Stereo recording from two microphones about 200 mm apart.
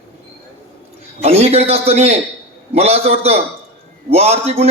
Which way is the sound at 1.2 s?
30° right (ahead or behind).